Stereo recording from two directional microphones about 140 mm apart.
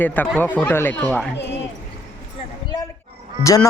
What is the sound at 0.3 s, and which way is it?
Speech, 15° left (ahead or behind).